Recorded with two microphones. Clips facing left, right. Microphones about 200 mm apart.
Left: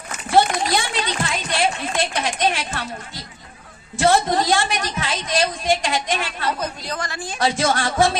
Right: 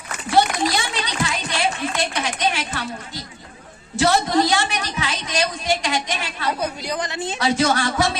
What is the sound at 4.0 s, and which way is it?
A woman's voice, 50° left (ahead or behind).